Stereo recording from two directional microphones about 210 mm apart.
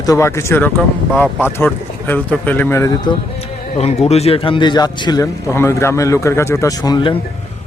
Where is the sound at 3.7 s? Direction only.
30° left (ahead or behind).